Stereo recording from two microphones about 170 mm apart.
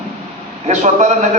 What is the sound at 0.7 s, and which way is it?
Speech, 45° right (ahead or behind).